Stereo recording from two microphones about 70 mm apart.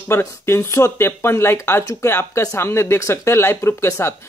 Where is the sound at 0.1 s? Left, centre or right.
Left.